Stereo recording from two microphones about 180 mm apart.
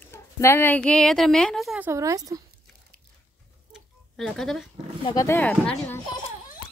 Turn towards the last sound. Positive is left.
turn(degrees=5)  # may be behind; listen again after turning